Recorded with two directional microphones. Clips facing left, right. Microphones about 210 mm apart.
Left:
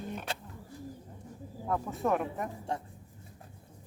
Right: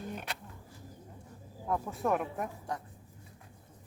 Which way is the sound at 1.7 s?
Centre (ahead or behind).